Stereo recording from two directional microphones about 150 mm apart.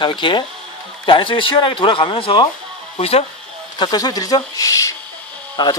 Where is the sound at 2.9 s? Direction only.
45° left (ahead or behind).